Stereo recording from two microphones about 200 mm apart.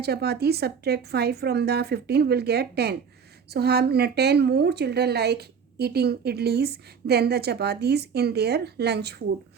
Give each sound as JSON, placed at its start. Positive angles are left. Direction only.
{"t": 0.0, "sound": "a woman's voice", "side_deg": -55}